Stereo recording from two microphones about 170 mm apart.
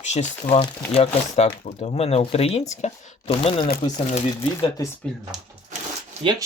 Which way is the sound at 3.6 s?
55° left (ahead or behind).